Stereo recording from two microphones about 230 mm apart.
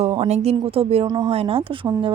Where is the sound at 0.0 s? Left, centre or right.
Right.